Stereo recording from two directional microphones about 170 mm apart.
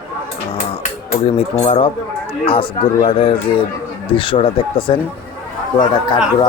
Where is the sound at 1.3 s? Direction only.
35° left (ahead or behind).